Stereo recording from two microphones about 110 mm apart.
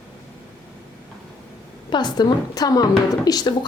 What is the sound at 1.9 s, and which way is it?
A woman's voice, 40° left (ahead or behind).